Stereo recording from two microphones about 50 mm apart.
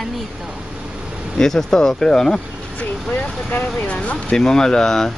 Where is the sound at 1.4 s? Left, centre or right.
Centre.